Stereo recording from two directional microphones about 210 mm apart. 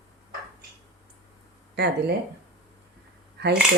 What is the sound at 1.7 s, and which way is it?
Speech, 50° right (ahead or behind).